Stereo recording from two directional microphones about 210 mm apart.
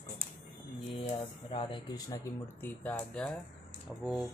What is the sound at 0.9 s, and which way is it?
Speech, 30° left (ahead or behind).